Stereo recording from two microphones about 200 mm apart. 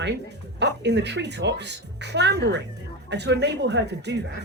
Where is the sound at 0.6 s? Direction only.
60° right (ahead or behind).